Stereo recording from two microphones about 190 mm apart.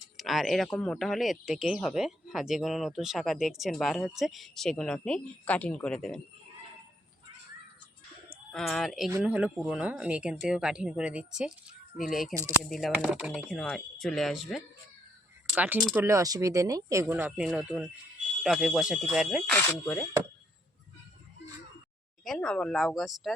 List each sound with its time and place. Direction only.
0.2 s speech: centre (ahead or behind)
8.3 s speech: 5° left (ahead or behind)
16.0 s speech: 15° right (ahead or behind); by 20.1 s 5° left (ahead or behind)
22.2 s speech: 5° left (ahead or behind)